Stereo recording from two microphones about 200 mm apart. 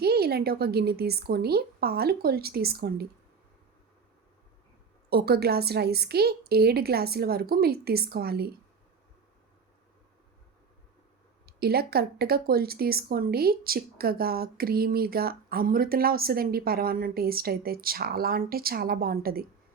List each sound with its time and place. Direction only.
0.0 s speech: 50° right (ahead or behind)
5.0 s speech: 50° right (ahead or behind)
11.4 s speech: 50° right (ahead or behind)